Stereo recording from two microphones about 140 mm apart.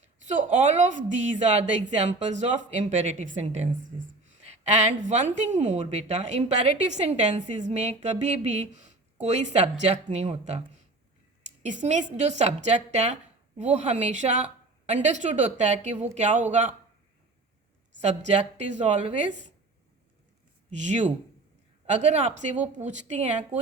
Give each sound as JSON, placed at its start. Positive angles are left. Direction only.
{"t": 0.0, "sound": "a woman's voice", "side_deg": -60}
{"t": 11.6, "sound": "a woman's voice", "side_deg": -60}
{"t": 18.0, "sound": "a woman's voice", "side_deg": -55}
{"t": 20.7, "sound": "a woman's voice", "side_deg": -55}